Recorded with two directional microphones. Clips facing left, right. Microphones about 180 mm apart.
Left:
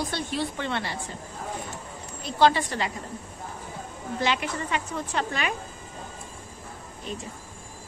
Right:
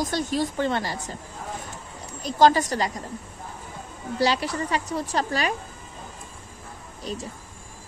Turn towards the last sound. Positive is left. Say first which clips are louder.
# right 3 dB
turn(degrees=-35)  # may be behind; listen again after turning